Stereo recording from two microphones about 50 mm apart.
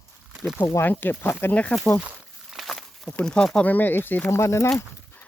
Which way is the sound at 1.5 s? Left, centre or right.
Left.